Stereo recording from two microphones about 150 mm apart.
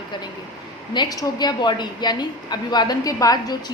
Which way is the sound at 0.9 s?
30° left (ahead or behind).